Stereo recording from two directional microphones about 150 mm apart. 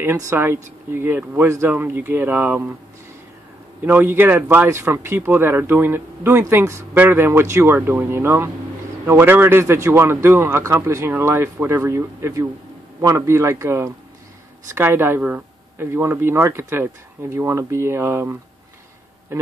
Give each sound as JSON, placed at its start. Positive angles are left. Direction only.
{"t": 0.0, "sound": "speech", "side_deg": -15}
{"t": 3.8, "sound": "speech", "side_deg": -15}